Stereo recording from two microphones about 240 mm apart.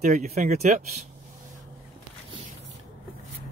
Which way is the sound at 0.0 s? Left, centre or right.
Right.